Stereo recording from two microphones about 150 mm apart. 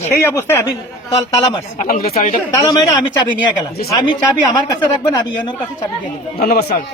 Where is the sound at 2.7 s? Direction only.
25° left (ahead or behind).